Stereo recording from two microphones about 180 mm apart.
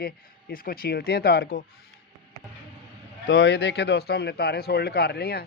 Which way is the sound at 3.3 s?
90° left.